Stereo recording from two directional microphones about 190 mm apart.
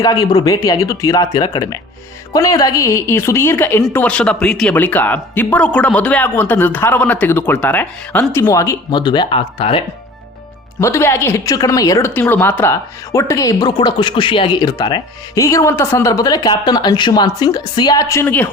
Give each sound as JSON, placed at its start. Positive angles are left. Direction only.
{"t": 0.0, "sound": "a woman's voice", "side_deg": 20}
{"t": 10.8, "sound": "a woman's voice", "side_deg": 15}